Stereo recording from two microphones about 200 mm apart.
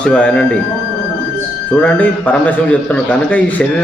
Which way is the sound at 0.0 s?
5° left (ahead or behind).